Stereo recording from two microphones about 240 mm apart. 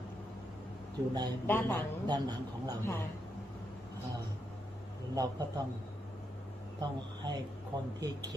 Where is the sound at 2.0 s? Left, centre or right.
Centre.